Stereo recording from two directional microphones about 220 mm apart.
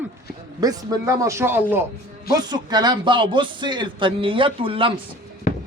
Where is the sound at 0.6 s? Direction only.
15° right (ahead or behind).